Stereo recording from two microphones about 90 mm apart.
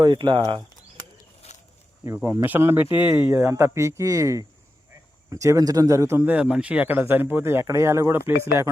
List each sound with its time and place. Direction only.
0.0 s speech: 60° right (ahead or behind)
2.0 s speech: 30° right (ahead or behind)
6.2 s speech: 15° right (ahead or behind); by 8.7 s 30° right (ahead or behind)